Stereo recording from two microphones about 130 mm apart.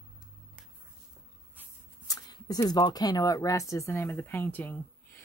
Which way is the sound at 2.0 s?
30° left (ahead or behind).